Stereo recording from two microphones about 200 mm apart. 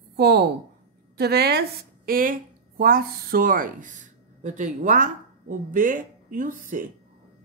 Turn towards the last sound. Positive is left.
turn(degrees=-40)  # may be behind; listen again after turning